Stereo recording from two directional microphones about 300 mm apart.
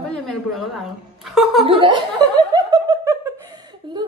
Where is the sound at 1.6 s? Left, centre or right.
Centre.